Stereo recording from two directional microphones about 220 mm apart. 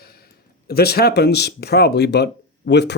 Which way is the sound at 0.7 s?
45° left (ahead or behind).